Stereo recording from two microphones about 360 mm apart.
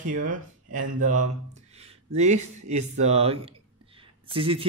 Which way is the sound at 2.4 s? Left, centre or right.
Right.